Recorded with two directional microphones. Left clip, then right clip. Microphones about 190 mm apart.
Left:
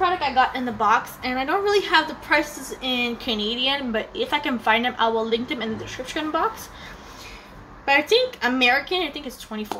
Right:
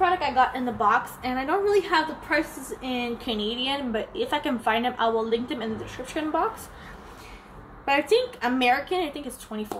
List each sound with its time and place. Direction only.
0.0 s a woman's voice: centre (ahead or behind)
7.8 s a woman's voice: centre (ahead or behind)